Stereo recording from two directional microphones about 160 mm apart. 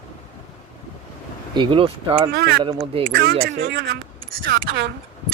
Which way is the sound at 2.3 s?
90° right.